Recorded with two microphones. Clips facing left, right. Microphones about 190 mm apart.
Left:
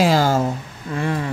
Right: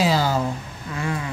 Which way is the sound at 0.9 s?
35° left (ahead or behind).